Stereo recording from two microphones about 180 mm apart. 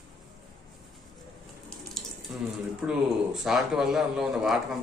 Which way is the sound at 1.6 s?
Centre (ahead or behind).